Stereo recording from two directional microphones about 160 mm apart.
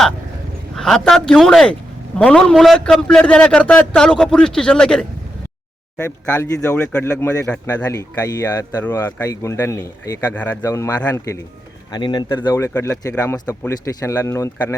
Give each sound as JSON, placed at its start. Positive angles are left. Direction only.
{"t": 0.8, "sound": "a man's voice", "side_deg": 5}
{"t": 6.0, "sound": "speech", "side_deg": 15}
{"t": 12.5, "sound": "speech", "side_deg": 15}